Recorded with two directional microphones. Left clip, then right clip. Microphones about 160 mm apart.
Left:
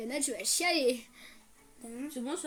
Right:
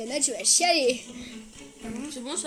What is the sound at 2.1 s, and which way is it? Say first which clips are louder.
Speech: right 1 dB; 30° left (ahead or behind).